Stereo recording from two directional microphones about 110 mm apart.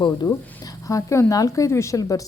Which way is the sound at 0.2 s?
30° left (ahead or behind).